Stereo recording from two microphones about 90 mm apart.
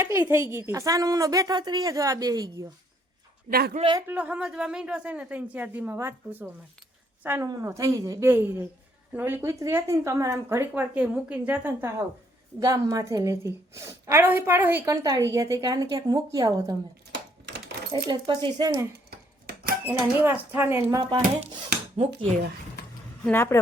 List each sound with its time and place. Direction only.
0.0 s a woman's voice: 30° right (ahead or behind)
4.0 s speech: 15° right (ahead or behind)
7.4 s a woman's voice: 45° right (ahead or behind)
8.3 s speech: 25° right (ahead or behind)
12.5 s a woman's voice: 40° right (ahead or behind); by 14.8 s 25° right (ahead or behind)
14.8 s a woman's voice: 40° right (ahead or behind)
17.9 s speech: 70° right (ahead or behind)
19.8 s speech: 20° right (ahead or behind)
21.0 s speech: 65° right (ahead or behind)
23.3 s a woman's voice: 25° left (ahead or behind)